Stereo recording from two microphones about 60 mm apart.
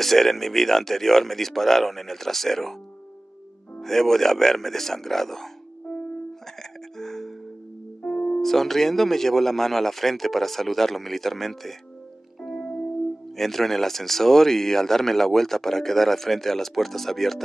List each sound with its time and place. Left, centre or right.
0.0 s speech: centre
3.8 s speech: centre
7.0 s music: centre
8.0 s music: left
8.4 s speech: centre
12.4 s music: centre
13.4 s speech: centre